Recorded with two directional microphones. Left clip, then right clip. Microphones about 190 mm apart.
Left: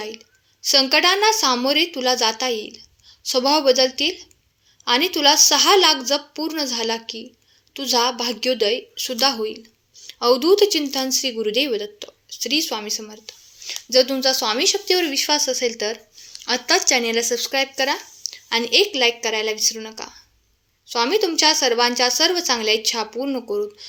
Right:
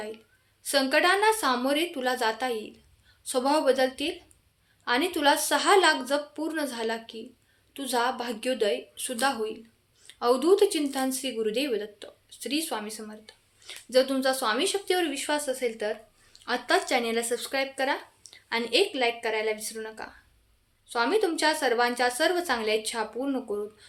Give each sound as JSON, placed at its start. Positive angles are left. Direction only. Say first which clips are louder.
{"t": 0.6, "sound": "speech", "louder": "left 7 dB", "side_deg": 25}